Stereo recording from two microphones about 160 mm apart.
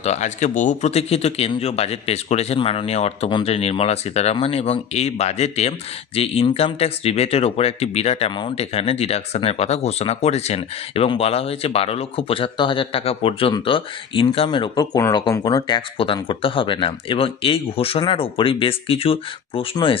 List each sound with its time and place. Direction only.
0.0 s speech: 45° left (ahead or behind)